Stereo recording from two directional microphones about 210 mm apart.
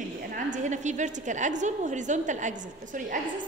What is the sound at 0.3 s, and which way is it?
A woman's voice, 35° right (ahead or behind).